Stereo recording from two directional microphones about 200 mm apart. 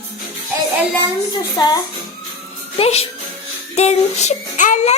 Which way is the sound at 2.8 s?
30° left (ahead or behind).